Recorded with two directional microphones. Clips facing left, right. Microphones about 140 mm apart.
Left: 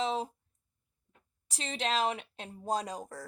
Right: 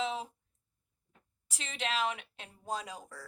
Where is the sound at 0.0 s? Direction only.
40° left (ahead or behind).